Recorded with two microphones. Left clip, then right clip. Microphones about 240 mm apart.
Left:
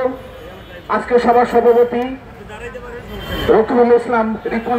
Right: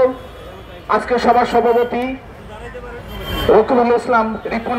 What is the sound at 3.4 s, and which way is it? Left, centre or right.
Speech, right.